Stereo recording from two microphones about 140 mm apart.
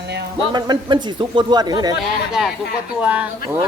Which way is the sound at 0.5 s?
30° right (ahead or behind).